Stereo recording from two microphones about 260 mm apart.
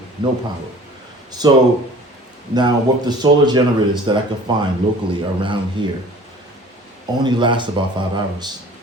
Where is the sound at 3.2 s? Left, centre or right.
Centre.